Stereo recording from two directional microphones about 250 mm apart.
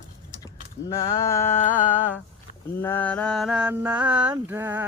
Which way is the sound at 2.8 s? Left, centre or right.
Centre.